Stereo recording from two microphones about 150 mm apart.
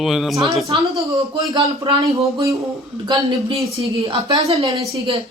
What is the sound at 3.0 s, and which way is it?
A man's voice, 25° right (ahead or behind).